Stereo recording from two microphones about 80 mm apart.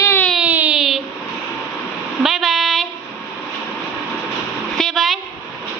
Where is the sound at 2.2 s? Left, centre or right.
Centre.